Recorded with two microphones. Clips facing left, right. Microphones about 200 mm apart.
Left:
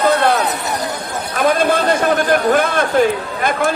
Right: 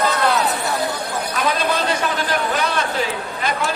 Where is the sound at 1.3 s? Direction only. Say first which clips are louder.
Left 7 dB; 50° left (ahead or behind).